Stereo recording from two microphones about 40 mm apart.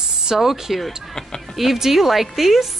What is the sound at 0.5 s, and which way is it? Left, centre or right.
A woman's voice, centre.